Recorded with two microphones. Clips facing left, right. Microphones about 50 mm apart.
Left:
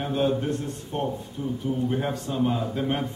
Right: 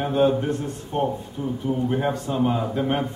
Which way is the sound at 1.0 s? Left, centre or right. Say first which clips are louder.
Right 2 dB; centre.